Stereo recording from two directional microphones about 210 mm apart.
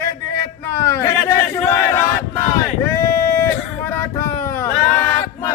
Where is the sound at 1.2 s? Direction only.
15° left (ahead or behind).